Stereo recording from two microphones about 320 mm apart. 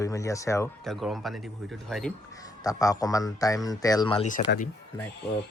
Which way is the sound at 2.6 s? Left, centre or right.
Centre.